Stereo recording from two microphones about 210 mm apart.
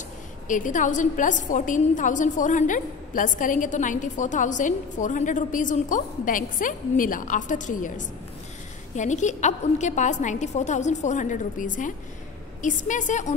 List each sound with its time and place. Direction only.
0.5 s a woman's voice: 35° left (ahead or behind)
8.9 s a woman's voice: 35° left (ahead or behind)